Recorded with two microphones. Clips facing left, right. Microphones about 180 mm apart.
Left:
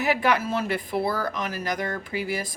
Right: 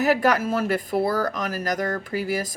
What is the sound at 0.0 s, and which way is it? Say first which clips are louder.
Speech: right 3 dB; 40° right (ahead or behind).